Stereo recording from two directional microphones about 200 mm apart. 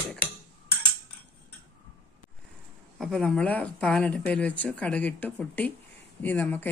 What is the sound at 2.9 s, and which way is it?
Speech, centre (ahead or behind).